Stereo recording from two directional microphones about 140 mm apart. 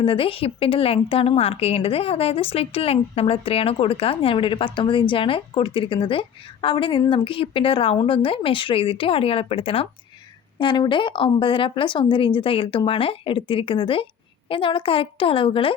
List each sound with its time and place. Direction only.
0.0 s speech: 40° left (ahead or behind)